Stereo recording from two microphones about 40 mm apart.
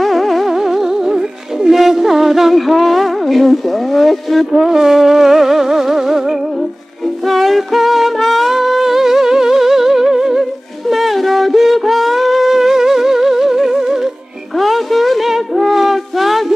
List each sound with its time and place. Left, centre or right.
0.0 s music: centre
4.6 s music: centre
8.5 s music: centre
10.9 s music: centre
14.6 s a sound: centre